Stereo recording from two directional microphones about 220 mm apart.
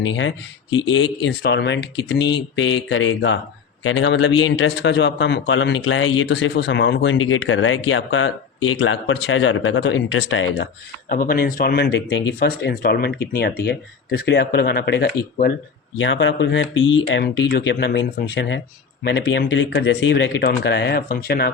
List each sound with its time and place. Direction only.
0.0 s a man's voice: 60° left (ahead or behind)
11.1 s a man's voice: 40° left (ahead or behind)